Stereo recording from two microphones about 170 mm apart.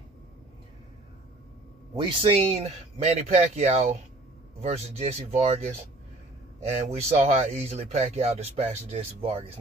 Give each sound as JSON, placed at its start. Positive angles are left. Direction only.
{"t": 2.0, "sound": "speech", "side_deg": -30}